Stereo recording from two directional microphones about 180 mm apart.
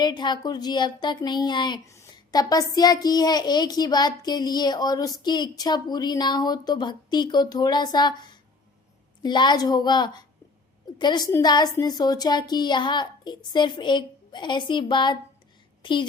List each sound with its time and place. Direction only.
0.0 s a woman's voice: 25° left (ahead or behind)